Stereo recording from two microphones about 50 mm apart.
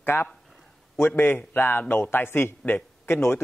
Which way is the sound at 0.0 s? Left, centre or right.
Left.